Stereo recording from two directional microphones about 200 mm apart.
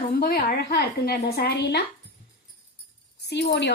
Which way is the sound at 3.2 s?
55° left (ahead or behind).